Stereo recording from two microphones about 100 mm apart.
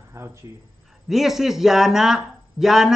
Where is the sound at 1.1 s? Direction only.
Centre (ahead or behind).